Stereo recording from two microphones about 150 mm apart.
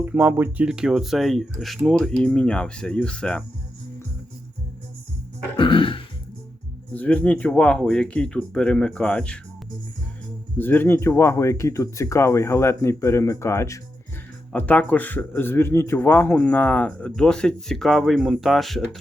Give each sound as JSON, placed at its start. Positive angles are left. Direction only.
{"t": 0.0, "sound": "speech", "side_deg": -10}
{"t": 5.5, "sound": "throat clearing", "side_deg": 35}
{"t": 6.9, "sound": "a man's voice", "side_deg": 10}
{"t": 10.6, "sound": "a man's voice", "side_deg": 15}